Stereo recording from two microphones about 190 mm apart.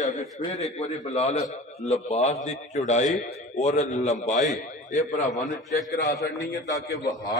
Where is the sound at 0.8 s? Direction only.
35° left (ahead or behind).